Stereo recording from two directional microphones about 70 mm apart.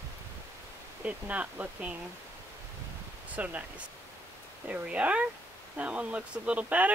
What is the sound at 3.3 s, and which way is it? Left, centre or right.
Speech, right.